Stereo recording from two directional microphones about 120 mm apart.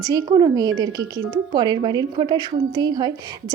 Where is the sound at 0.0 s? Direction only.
30° right (ahead or behind).